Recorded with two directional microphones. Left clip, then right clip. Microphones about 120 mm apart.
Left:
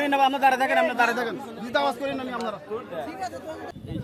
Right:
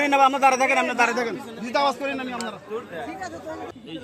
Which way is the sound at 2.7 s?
20° left (ahead or behind).